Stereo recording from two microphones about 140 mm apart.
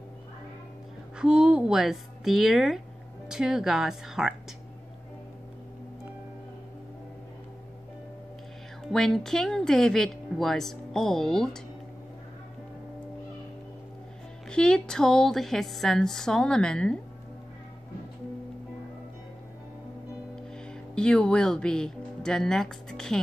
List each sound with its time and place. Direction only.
1.1 s speech: 5° right (ahead or behind)
8.8 s speech: 5° left (ahead or behind)
14.5 s speech: 5° left (ahead or behind)
20.5 s speech: 5° left (ahead or behind)